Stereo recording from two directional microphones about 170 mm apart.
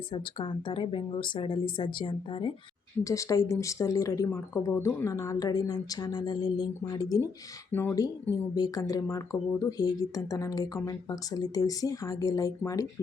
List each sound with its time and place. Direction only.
0.1 s speech: 30° left (ahead or behind)
3.0 s speech: 20° left (ahead or behind)
7.7 s speech: 10° left (ahead or behind)